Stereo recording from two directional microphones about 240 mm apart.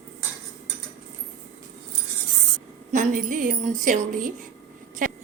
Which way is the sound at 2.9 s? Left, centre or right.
Right.